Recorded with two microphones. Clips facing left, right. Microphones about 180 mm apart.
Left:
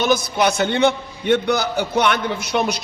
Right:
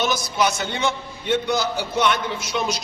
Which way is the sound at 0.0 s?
60° left (ahead or behind).